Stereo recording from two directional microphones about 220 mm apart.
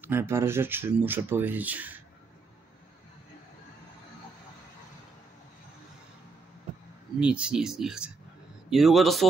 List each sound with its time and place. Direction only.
0.0 s speech: 10° right (ahead or behind)
7.2 s speech: 5° right (ahead or behind)